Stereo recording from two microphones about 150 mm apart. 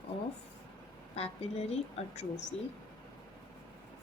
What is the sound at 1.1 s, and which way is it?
Speech, 45° left (ahead or behind).